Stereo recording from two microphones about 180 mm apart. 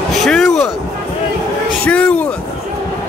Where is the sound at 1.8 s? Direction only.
5° left (ahead or behind).